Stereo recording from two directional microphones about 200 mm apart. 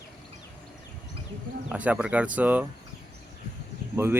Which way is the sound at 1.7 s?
5° right (ahead or behind).